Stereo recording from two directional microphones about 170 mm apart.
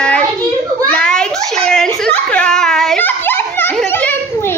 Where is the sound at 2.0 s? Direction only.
10° left (ahead or behind).